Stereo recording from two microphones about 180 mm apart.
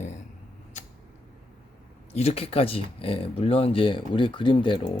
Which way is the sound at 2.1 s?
35° left (ahead or behind).